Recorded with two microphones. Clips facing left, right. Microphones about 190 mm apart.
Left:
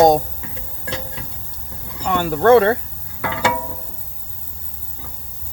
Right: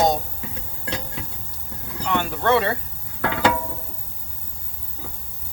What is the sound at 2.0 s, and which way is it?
Speech, 45° left (ahead or behind).